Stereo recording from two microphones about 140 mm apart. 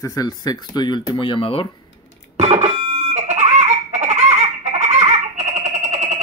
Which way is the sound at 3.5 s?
55° right (ahead or behind).